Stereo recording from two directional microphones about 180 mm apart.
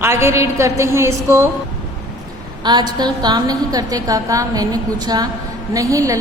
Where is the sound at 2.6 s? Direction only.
25° right (ahead or behind).